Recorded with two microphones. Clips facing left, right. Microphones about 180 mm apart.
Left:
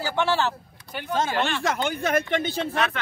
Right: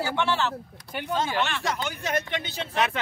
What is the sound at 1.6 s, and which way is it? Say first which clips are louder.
Speech: left 5 dB; 55° left (ahead or behind).